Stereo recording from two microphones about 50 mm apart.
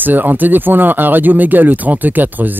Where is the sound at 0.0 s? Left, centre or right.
Right.